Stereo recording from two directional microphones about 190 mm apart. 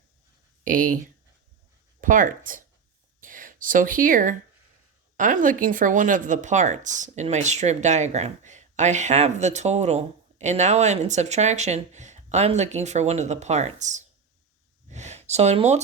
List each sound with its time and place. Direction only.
0.6 s speech: 45° right (ahead or behind)
2.0 s speech: 45° right (ahead or behind)
3.2 s a sound: 45° right (ahead or behind)
5.1 s speech: 45° right (ahead or behind)